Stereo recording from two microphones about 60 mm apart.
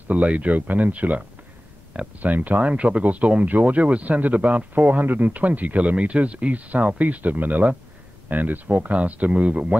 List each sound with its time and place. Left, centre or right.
0.1 s speech: right